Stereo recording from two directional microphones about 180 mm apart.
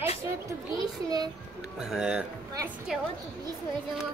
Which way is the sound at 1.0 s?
20° right (ahead or behind).